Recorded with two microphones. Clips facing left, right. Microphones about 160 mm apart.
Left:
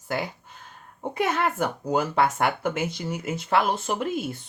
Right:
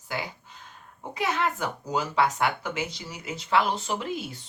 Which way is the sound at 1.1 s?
55° left (ahead or behind).